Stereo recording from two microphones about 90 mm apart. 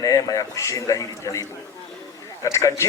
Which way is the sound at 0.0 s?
40° left (ahead or behind).